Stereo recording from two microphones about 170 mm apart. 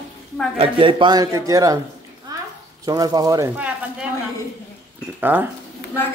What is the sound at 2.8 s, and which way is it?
Speech, 20° right (ahead or behind).